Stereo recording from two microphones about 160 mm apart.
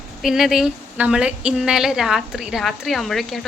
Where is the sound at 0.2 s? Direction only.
Centre (ahead or behind).